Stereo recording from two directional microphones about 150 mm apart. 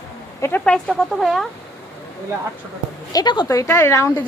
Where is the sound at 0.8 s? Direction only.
Centre (ahead or behind).